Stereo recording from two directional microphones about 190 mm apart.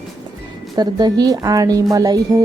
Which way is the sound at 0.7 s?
20° right (ahead or behind).